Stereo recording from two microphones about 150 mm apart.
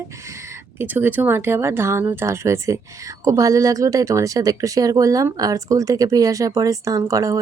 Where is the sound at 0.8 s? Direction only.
15° right (ahead or behind).